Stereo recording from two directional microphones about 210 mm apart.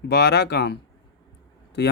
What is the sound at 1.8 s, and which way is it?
Speech, 55° left (ahead or behind).